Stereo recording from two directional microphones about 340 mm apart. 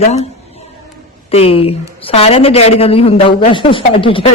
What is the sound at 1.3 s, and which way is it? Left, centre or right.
A woman's voice, centre.